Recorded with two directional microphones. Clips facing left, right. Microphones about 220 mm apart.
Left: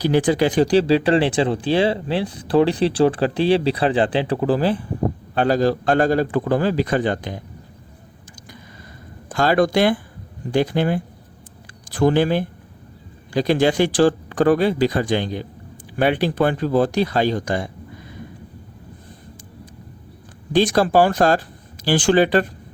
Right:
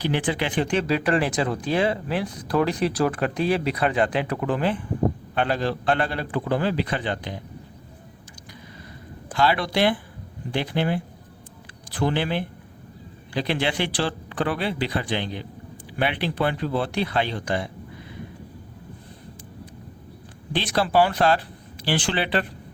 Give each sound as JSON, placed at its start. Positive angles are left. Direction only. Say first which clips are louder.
{"t": 0.0, "sound": "speech", "louder": "left 8 dB", "side_deg": 40}
{"t": 9.3, "sound": "speech", "louder": "left 6 dB", "side_deg": 45}
{"t": 20.5, "sound": "speech", "louder": "left 7 dB", "side_deg": 45}